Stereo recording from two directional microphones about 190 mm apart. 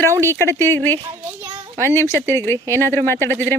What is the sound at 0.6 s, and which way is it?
Speech, 10° left (ahead or behind).